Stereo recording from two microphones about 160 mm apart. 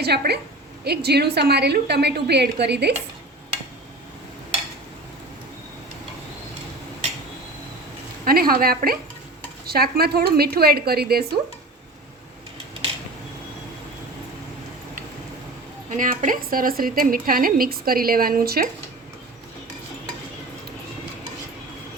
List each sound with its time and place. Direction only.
0.0 s a woman's voice: 90° right
8.2 s a woman's voice: 65° right (ahead or behind)
15.9 s a woman's voice: 55° right (ahead or behind); by 18.7 s 70° right (ahead or behind)